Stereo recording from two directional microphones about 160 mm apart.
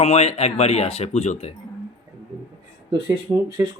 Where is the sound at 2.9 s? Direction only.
30° right (ahead or behind).